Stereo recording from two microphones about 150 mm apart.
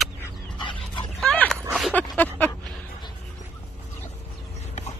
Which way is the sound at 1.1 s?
5° left (ahead or behind).